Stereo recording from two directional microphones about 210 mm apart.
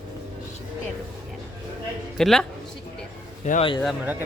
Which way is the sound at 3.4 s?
30° left (ahead or behind).